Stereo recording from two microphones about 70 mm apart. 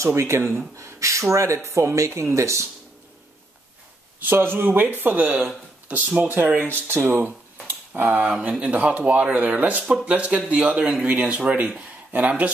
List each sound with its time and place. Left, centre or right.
0.0 s speech: right
4.2 s speech: right
7.6 s a sound: right
8.4 s speech: centre